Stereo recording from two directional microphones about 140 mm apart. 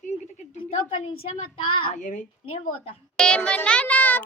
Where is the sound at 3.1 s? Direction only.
5° left (ahead or behind).